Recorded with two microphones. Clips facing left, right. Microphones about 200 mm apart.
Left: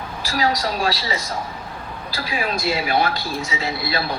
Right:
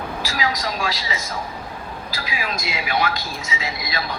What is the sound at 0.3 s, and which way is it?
Speech, 35° left (ahead or behind).